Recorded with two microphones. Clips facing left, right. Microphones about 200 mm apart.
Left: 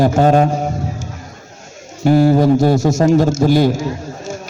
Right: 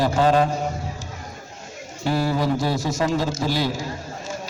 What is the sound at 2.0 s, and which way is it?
A man's voice, 50° left (ahead or behind).